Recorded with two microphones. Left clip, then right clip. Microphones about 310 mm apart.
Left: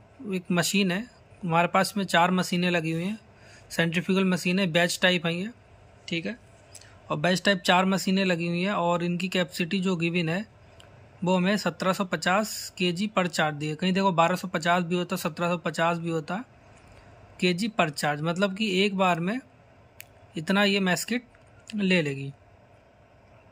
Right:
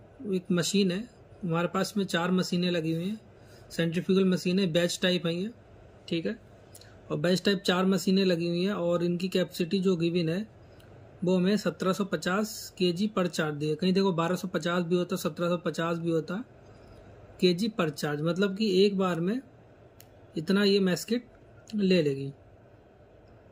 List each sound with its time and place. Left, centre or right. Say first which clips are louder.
0.3 s speech: left 2 dB; centre
7.1 s speech: left 3 dB; left
7.6 s speech: left 4 dB; centre